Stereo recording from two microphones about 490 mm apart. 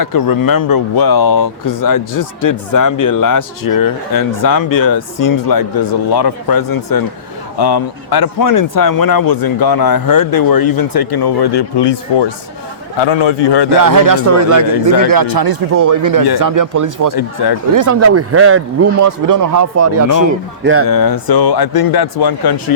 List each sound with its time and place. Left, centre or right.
0.0 s a man's voice: left
13.7 s speech: right
17.2 s a man's voice: left
17.7 s speech: right
20.8 s a man's voice: left